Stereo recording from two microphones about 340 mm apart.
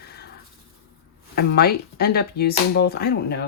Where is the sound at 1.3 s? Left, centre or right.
Left.